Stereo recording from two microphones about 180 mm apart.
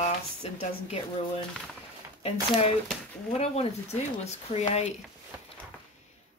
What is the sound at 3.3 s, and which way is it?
Speech, 35° left (ahead or behind).